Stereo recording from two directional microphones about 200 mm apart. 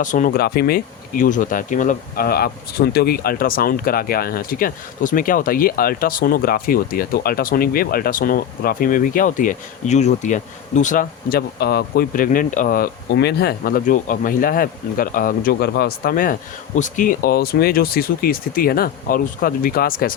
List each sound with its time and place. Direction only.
0.0 s speech: 40° left (ahead or behind)